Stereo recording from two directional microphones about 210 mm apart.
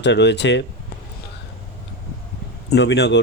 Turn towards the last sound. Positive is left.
turn(degrees=55)  # may be behind; listen again after turning